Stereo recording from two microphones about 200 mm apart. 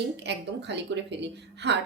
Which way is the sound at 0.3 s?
60° right (ahead or behind).